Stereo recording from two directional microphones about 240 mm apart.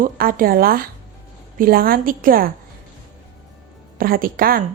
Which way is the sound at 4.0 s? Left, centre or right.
Right.